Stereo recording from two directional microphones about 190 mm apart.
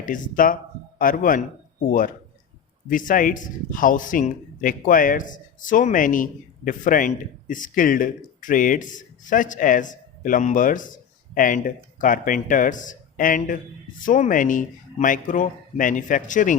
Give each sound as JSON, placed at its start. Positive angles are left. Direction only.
{"t": 0.0, "sound": "a man's voice", "side_deg": 45}
{"t": 2.9, "sound": "a man's voice", "side_deg": 45}